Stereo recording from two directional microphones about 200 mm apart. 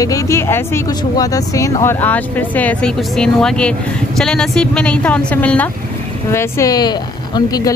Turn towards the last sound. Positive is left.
turn(degrees=20)  # may be behind; listen again after turning